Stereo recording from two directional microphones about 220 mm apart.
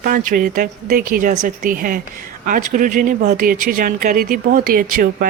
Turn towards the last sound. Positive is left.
turn(degrees=-40)  # may be behind; listen again after turning